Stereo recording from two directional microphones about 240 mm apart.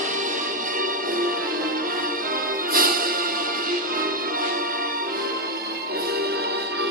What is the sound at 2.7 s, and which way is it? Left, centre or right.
Music, right.